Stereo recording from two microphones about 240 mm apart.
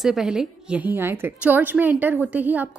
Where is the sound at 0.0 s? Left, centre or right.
Centre.